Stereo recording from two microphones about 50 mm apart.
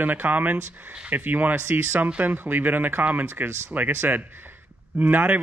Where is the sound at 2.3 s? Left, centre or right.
Right.